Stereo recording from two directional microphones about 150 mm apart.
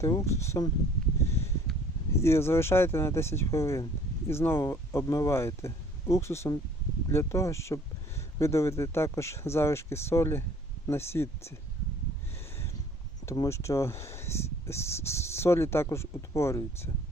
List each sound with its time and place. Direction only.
0.0 s speech: 20° left (ahead or behind)
2.1 s speech: 15° left (ahead or behind)
13.2 s speech: 20° left (ahead or behind)